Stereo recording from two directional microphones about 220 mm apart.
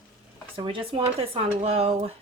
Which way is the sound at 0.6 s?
20° right (ahead or behind).